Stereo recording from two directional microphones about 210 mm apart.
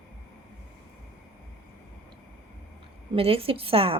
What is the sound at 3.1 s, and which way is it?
Speech, 25° right (ahead or behind).